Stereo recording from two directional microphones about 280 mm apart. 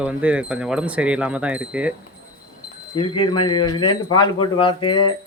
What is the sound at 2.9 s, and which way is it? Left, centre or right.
Speech, centre.